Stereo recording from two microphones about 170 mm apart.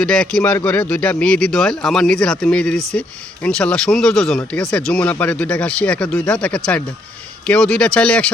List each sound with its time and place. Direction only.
0.0 s speech: 5° left (ahead or behind)